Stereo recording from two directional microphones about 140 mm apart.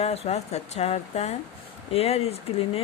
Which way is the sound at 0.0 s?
45° left (ahead or behind).